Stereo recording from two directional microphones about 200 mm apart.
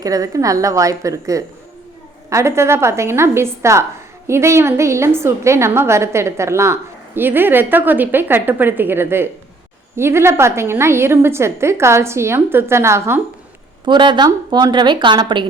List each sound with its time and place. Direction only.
0.0 s a woman's voice: 15° right (ahead or behind)
13.8 s a woman's voice: 25° right (ahead or behind)